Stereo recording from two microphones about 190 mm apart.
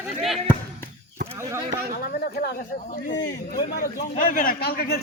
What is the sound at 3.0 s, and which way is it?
Speech, 65° left (ahead or behind).